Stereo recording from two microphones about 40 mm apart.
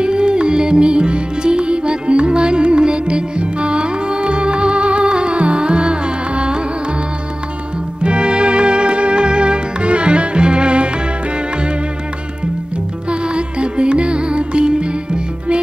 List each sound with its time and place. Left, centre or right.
0.0 s music: right
8.0 s music: right
13.1 s music: right